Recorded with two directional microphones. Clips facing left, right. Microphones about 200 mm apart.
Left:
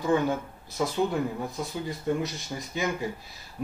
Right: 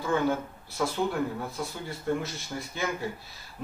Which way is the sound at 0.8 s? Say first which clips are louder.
Left 2 dB; 20° left (ahead or behind).